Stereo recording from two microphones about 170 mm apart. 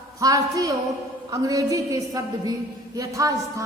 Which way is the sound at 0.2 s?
20° right (ahead or behind).